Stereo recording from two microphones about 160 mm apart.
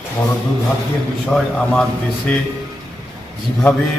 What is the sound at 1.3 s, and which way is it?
Speech, 5° left (ahead or behind).